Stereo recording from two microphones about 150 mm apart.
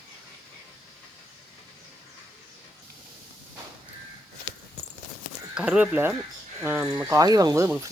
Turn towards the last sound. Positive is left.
turn(degrees=-20)  # may be behind; listen again after turning